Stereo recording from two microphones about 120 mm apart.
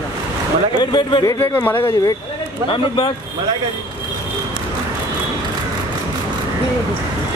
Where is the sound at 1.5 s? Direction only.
20° left (ahead or behind).